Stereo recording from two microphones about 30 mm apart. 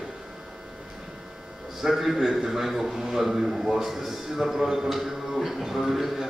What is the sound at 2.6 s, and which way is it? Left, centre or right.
A man's voice, centre.